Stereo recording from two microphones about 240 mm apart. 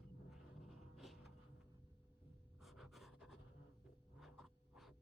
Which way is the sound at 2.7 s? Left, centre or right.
Centre.